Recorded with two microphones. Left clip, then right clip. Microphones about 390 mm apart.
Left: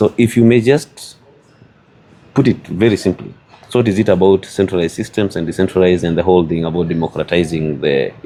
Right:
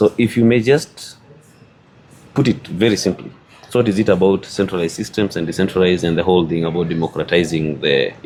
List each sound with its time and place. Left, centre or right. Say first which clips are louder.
0.0 s speech: left 2 dB; left
2.3 s speech: left 3 dB; left